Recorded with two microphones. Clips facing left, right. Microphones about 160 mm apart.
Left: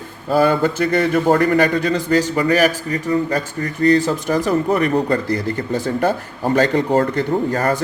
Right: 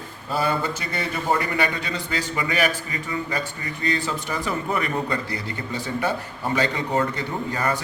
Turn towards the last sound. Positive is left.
turn(degrees=45)  # may be behind; listen again after turning